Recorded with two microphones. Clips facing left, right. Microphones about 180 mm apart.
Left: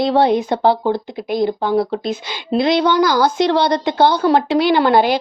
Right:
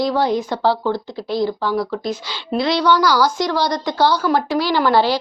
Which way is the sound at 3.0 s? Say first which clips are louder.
Left 2 dB; 50° left (ahead or behind).